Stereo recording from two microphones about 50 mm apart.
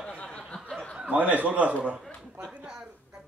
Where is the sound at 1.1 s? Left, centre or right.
Right.